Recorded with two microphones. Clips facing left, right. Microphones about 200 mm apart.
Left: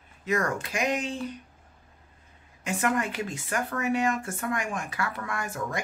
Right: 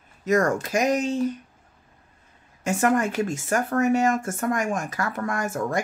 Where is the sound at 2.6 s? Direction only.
45° right (ahead or behind).